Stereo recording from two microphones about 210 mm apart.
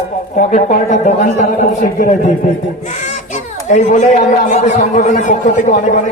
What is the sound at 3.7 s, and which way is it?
Speech, 35° left (ahead or behind).